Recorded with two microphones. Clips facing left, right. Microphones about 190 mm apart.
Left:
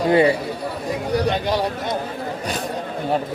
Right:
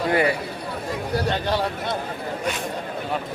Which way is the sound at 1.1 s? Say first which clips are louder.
Left 3 dB; 15° left (ahead or behind).